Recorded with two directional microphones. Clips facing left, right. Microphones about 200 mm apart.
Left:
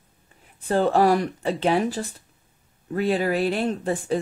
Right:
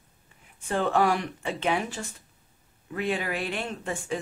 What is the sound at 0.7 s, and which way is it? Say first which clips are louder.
Speech: left 5 dB; 35° left (ahead or behind).